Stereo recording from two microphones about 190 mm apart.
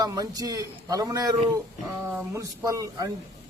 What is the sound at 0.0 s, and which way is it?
A man's voice, 20° right (ahead or behind).